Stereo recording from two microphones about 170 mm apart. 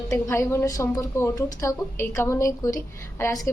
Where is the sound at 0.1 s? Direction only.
15° left (ahead or behind).